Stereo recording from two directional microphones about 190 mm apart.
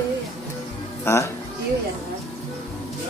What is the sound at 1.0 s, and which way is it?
Speech, 15° left (ahead or behind).